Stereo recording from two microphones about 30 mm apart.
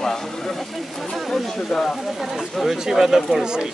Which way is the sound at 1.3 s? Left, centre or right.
Left.